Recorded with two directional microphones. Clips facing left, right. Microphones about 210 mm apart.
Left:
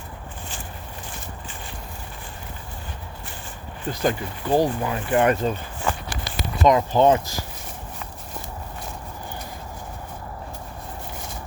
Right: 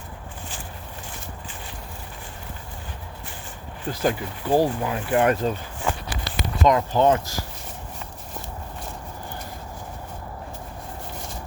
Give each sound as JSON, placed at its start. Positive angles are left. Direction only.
{"t": 3.8, "sound": "speech", "side_deg": -5}
{"t": 6.2, "sound": "speech", "side_deg": 15}